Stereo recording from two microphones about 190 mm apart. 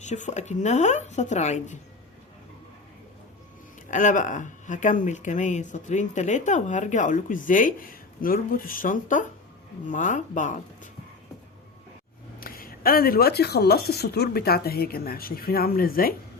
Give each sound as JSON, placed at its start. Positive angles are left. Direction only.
{"t": 0.0, "sound": "speech", "side_deg": 40}
{"t": 3.8, "sound": "speech", "side_deg": 40}
{"t": 12.4, "sound": "speech", "side_deg": 50}